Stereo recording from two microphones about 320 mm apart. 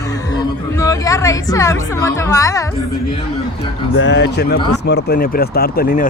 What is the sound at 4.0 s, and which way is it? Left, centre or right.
Speech, left.